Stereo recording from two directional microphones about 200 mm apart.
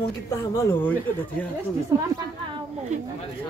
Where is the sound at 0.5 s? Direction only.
15° left (ahead or behind).